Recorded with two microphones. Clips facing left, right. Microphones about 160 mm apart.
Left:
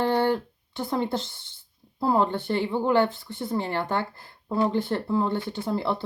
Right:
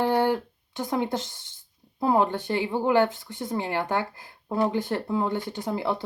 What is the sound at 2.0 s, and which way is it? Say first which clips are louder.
Speech: even; 15° right (ahead or behind).